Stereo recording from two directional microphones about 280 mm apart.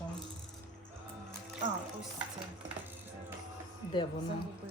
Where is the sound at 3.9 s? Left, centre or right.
Centre.